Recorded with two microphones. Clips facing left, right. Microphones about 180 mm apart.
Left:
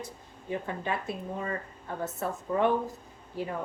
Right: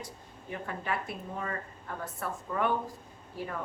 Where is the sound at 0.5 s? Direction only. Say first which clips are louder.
Left 3 dB; 25° left (ahead or behind).